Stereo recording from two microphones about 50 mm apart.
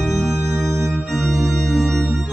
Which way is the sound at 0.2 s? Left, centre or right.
Centre.